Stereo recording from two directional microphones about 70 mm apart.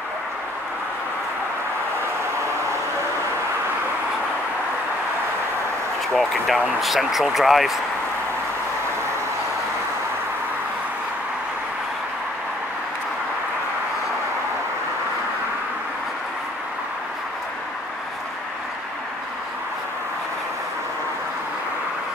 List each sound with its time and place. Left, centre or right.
6.1 s speech: centre